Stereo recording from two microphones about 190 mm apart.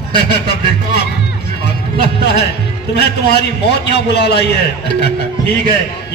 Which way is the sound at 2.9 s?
60° left (ahead or behind).